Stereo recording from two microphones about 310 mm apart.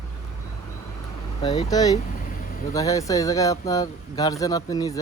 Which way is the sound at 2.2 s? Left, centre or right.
Left.